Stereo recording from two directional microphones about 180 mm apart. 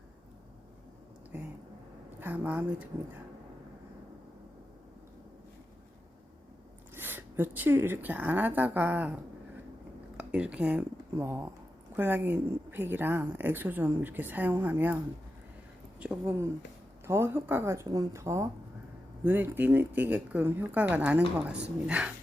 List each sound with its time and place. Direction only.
1.3 s speech: 5° right (ahead or behind)
6.9 s speech: 10° right (ahead or behind)
16.0 s speech: 10° right (ahead or behind)